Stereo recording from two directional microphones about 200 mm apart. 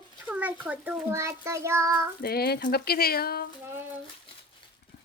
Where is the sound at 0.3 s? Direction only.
10° right (ahead or behind).